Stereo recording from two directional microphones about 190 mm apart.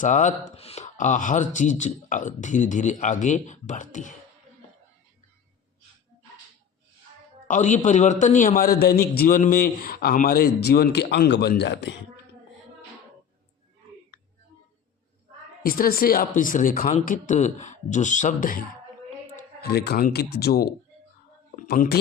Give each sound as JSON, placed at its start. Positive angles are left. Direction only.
{"t": 0.0, "sound": "speech", "side_deg": 40}
{"t": 7.4, "sound": "a man's voice", "side_deg": 40}
{"t": 15.6, "sound": "a man's voice", "side_deg": 50}
{"t": 19.6, "sound": "speech", "side_deg": 55}
{"t": 21.5, "sound": "a sound", "side_deg": 50}